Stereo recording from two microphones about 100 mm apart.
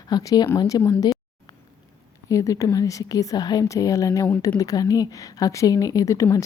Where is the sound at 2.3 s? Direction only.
35° left (ahead or behind).